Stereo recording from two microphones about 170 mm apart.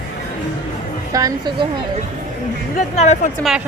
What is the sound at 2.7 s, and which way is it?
Speech, 40° left (ahead or behind).